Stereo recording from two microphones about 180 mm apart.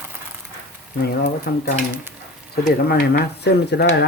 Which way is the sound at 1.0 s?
60° left (ahead or behind).